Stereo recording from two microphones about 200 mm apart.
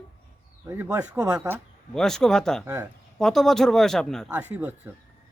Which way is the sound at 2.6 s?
15° right (ahead or behind).